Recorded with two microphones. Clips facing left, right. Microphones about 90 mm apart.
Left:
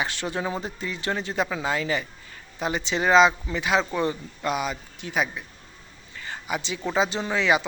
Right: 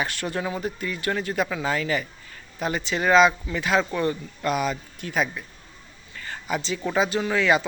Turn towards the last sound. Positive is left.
turn(degrees=20)  # may be behind; listen again after turning